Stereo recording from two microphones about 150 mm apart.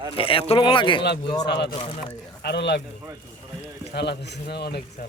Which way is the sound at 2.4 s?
90° left.